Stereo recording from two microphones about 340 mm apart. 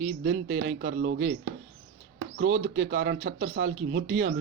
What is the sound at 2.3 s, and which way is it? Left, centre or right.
Speech, right.